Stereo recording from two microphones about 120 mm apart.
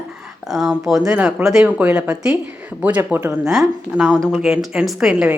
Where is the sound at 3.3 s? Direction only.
5° right (ahead or behind).